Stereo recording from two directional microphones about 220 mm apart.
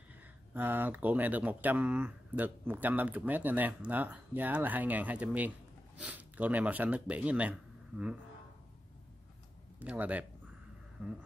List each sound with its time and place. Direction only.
0.6 s speech: 10° right (ahead or behind)
9.8 s speech: 5° right (ahead or behind)